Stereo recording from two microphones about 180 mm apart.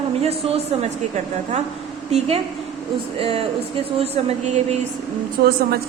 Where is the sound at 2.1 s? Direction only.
35° right (ahead or behind).